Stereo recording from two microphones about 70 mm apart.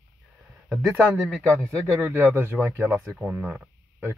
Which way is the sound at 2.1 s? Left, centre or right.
Right.